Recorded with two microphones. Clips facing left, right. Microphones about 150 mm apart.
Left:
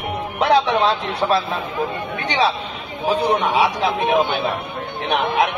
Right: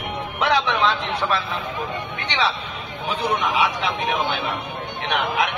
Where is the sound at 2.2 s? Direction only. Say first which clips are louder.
Left 5 dB; 35° left (ahead or behind).